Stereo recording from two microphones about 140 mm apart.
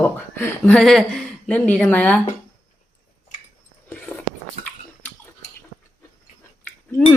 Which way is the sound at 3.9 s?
10° left (ahead or behind).